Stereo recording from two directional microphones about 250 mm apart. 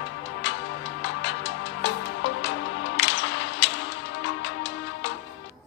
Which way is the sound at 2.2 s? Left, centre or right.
Left.